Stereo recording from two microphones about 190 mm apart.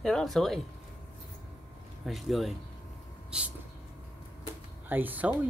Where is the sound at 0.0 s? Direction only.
Centre (ahead or behind).